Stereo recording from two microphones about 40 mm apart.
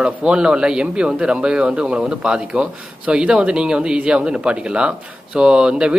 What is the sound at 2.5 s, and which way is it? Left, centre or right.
Speech, right.